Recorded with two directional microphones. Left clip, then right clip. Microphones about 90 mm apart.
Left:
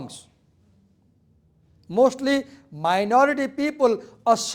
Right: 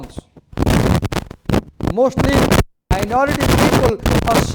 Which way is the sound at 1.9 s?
35° right (ahead or behind).